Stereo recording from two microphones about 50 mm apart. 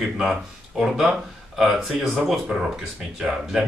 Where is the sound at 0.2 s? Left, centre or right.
Centre.